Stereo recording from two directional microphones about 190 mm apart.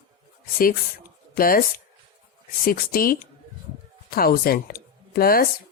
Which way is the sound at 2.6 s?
50° left (ahead or behind).